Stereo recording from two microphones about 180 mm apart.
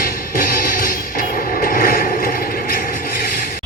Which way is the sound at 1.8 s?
50° left (ahead or behind).